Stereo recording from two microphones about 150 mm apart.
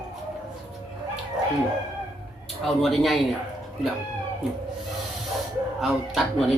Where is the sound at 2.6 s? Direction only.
Centre (ahead or behind).